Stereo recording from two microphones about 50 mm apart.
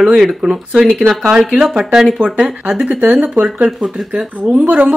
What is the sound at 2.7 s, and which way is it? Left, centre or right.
Speech, right.